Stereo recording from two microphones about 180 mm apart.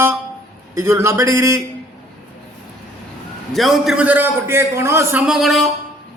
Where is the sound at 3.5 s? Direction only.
Centre (ahead or behind).